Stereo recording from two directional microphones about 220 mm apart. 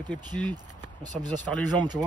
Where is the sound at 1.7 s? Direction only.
20° right (ahead or behind).